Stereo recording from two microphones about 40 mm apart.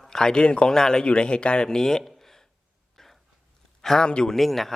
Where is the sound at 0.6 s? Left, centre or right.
Centre.